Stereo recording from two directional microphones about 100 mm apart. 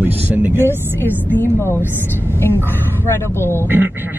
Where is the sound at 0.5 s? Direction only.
25° left (ahead or behind).